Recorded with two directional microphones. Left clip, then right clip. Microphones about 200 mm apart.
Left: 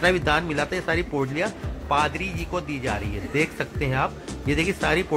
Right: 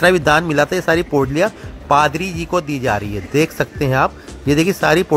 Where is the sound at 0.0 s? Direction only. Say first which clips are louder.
Right 8 dB; 45° right (ahead or behind).